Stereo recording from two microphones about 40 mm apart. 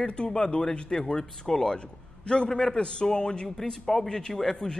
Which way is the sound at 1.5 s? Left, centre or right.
Centre.